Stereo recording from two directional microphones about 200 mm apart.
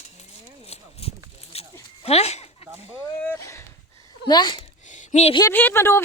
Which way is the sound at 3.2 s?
15° left (ahead or behind).